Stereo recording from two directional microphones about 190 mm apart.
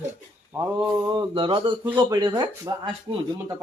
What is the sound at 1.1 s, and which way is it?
Speech, 25° right (ahead or behind).